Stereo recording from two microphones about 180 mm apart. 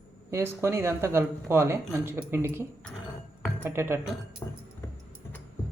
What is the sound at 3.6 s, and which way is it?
Speech, 15° right (ahead or behind).